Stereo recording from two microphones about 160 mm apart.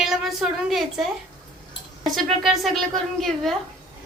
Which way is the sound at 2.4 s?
Centre (ahead or behind).